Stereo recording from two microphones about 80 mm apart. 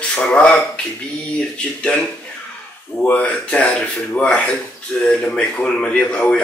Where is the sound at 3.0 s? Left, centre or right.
Centre.